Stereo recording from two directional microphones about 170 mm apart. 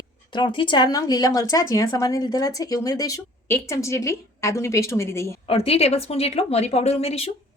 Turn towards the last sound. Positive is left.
turn(degrees=35)  # may be behind; listen again after turning